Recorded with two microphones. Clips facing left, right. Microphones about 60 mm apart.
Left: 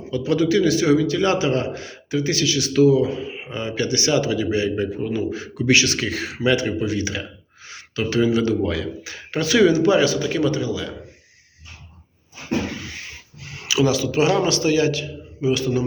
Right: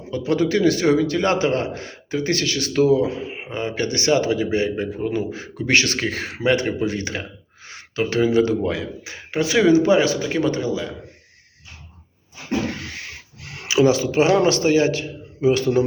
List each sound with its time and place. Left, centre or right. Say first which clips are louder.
0.1 s speech: left 1 dB; right
3.4 s speech: right 1 dB; right
13.4 s a sound: even; right
13.7 s speech: right 3 dB; right